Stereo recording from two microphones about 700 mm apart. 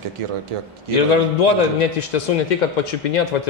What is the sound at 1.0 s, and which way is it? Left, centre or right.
A man's voice, left.